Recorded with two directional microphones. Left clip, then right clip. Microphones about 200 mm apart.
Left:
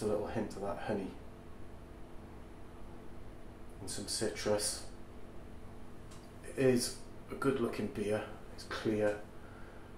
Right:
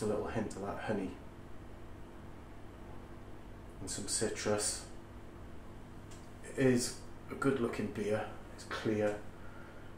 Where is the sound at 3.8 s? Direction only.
5° left (ahead or behind).